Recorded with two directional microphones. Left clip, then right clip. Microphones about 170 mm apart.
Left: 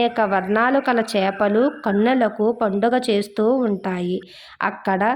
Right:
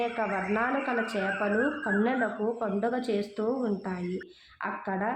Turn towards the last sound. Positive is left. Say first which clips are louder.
# left 11 dB
turn(degrees=40)  # may be behind; listen again after turning